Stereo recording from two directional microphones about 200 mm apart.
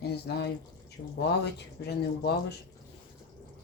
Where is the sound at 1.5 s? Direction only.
55° left (ahead or behind).